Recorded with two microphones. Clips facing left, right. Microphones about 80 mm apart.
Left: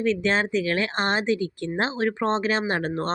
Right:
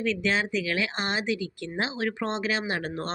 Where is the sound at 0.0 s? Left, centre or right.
Left.